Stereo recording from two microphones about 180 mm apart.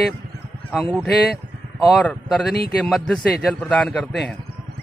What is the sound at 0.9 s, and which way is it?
A man's voice, centre (ahead or behind).